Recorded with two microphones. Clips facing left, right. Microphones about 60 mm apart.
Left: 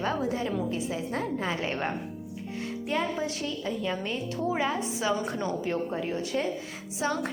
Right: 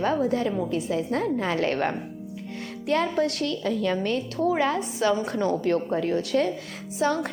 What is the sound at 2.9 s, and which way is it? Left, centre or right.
A woman's voice, right.